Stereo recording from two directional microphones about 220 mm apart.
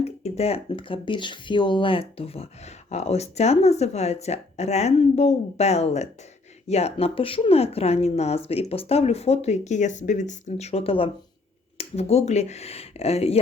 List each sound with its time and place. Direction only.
0.0 s speech: 30° left (ahead or behind)